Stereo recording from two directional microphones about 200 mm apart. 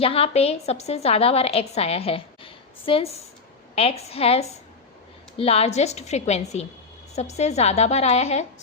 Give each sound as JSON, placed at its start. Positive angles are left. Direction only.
{"t": 0.0, "sound": "a woman's voice", "side_deg": 30}